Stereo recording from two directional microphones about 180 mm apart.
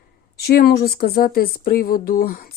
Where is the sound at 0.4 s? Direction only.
60° left (ahead or behind).